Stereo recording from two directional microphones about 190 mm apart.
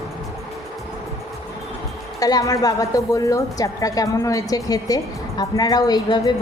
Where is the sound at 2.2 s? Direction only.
20° left (ahead or behind).